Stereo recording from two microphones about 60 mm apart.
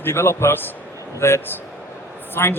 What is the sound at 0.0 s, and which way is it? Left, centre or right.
A man's voice, left.